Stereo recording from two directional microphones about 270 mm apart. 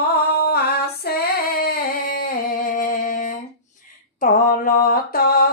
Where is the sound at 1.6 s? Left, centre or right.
Left.